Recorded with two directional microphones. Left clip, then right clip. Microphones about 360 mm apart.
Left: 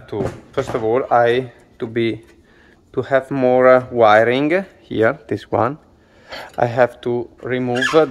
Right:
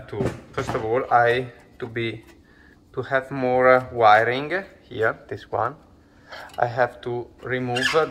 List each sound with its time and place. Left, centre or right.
0.0 s speech: left